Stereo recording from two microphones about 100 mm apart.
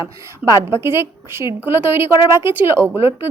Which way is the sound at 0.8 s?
25° right (ahead or behind).